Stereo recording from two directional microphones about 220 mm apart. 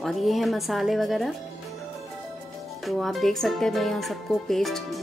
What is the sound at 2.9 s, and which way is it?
Speech, centre (ahead or behind).